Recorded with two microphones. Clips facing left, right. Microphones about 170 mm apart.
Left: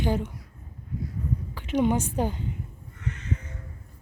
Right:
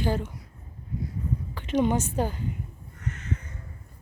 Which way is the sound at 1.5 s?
10° left (ahead or behind).